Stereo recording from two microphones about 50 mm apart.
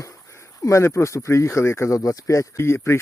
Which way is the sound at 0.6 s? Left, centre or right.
Left.